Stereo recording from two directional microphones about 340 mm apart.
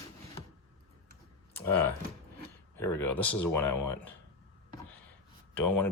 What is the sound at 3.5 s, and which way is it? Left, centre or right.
Speech, left.